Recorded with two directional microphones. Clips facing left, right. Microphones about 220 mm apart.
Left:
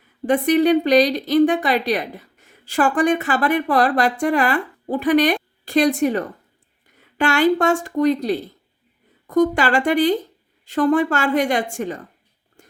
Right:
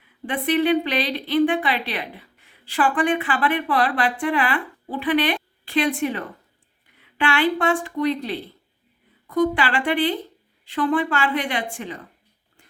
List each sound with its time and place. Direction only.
0.0 s a woman's voice: 45° left (ahead or behind)
12.6 s dog: 45° left (ahead or behind)